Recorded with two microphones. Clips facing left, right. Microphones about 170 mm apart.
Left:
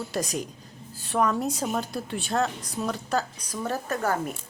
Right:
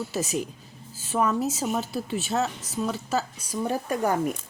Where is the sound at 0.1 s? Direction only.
5° right (ahead or behind).